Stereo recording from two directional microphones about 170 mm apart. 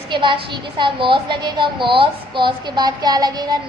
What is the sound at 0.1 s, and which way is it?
A woman's voice, 30° right (ahead or behind).